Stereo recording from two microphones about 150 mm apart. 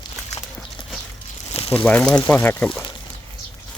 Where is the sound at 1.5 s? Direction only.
40° left (ahead or behind).